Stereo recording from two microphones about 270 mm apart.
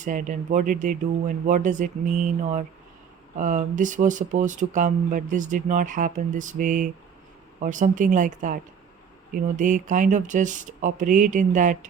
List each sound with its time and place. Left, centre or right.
0.0 s speech: right